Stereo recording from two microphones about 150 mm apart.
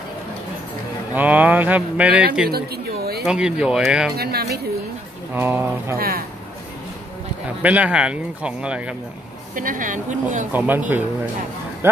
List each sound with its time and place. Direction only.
1.1 s speech: 10° right (ahead or behind)
2.5 s a sound: 90° right
3.3 s speech: 5° right (ahead or behind)
4.2 s speech: 90° right
5.3 s speech: 15° right (ahead or behind)
5.9 s speech: 85° right
7.6 s speech: 10° right (ahead or behind)
9.6 s speech: 65° right (ahead or behind)
10.5 s speech: 10° right (ahead or behind)